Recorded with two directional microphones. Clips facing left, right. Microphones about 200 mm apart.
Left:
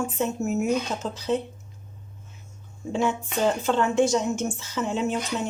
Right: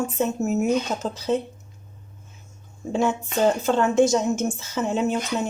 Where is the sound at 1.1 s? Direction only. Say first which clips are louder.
Right 2 dB; 45° right (ahead or behind).